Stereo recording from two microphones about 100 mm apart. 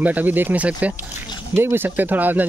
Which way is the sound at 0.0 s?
15° right (ahead or behind).